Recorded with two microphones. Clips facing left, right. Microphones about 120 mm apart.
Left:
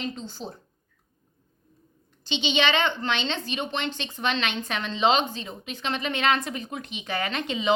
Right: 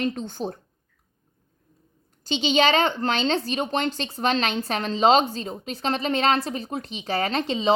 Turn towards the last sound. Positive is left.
turn(degrees=-35)  # may be behind; listen again after turning